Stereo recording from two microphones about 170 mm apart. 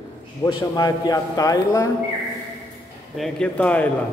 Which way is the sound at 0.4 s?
20° left (ahead or behind).